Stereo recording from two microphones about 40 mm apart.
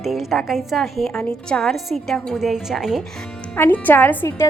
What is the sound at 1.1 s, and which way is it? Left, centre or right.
Speech, centre.